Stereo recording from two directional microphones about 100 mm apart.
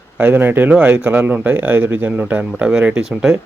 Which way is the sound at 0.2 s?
15° right (ahead or behind).